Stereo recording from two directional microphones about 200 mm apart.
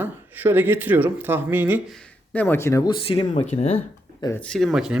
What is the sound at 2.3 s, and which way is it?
Speech, 10° left (ahead or behind).